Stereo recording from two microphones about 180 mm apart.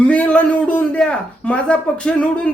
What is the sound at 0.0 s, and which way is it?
A man's voice, 5° left (ahead or behind).